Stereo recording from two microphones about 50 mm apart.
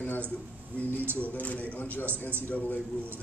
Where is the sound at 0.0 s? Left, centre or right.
Left.